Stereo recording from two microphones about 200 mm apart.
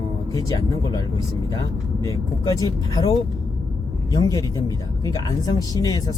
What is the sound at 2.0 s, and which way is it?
Speech, 15° left (ahead or behind).